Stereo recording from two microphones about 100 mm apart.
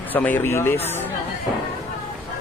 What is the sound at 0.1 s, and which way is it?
Speech, 20° left (ahead or behind).